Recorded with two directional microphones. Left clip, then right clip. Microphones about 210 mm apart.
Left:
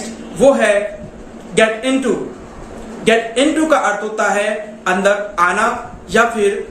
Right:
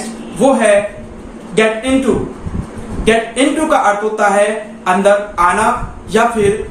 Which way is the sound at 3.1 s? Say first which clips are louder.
Right 1 dB; 15° left (ahead or behind).